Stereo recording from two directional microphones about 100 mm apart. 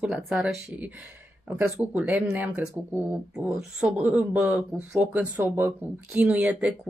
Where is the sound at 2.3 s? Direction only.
25° right (ahead or behind).